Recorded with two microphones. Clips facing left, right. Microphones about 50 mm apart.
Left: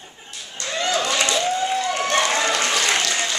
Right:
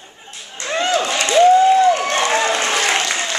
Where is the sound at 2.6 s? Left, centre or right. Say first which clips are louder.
Right 3 dB; right.